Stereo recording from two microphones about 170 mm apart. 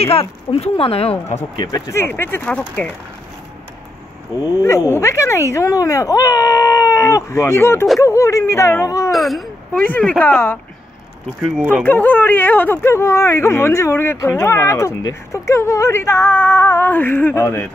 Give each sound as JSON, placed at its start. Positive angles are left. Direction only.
{"t": 0.0, "sound": "speech", "side_deg": 35}
{"t": 1.3, "sound": "speech", "side_deg": 20}
{"t": 4.6, "sound": "speech", "side_deg": 15}
{"t": 9.1, "sound": "speech", "side_deg": 0}
{"t": 11.4, "sound": "speech", "side_deg": -5}
{"t": 11.8, "sound": "speech", "side_deg": 10}